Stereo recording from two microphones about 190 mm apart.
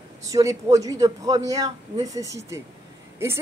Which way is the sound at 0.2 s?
15° right (ahead or behind).